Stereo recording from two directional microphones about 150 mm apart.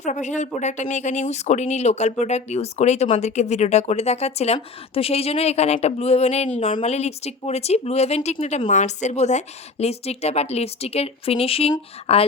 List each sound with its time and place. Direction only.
0.0 s speech: 55° left (ahead or behind)